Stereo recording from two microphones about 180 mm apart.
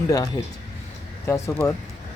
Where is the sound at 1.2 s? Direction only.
15° left (ahead or behind).